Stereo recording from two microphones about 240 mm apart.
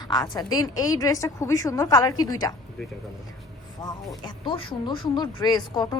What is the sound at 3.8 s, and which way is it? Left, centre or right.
A woman's voice, centre.